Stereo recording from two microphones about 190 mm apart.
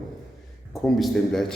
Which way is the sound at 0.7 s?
Centre (ahead or behind).